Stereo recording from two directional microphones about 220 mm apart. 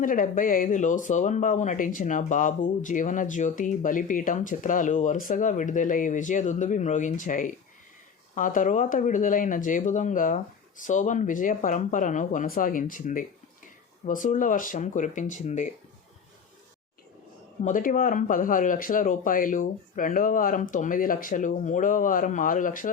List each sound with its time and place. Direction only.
0.0 s speech: 40° left (ahead or behind)
17.6 s speech: 35° left (ahead or behind)